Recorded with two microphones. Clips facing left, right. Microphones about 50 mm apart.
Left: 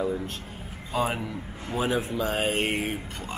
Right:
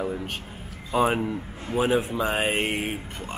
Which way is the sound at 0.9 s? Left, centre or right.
Right.